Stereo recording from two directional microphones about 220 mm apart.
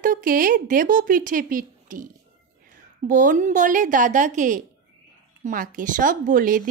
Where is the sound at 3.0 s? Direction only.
35° right (ahead or behind).